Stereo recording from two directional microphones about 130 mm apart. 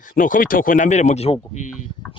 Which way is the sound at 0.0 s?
90° left.